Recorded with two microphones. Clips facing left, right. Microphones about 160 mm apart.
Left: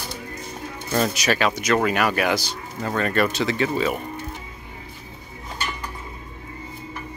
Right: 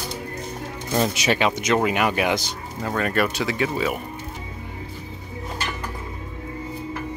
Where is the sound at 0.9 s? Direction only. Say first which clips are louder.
Even; 20° right (ahead or behind).